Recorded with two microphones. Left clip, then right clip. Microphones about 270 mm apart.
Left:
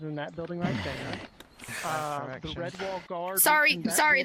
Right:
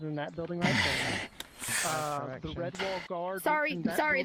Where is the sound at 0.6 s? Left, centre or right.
Right.